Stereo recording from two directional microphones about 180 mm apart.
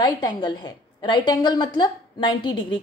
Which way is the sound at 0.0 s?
25° left (ahead or behind).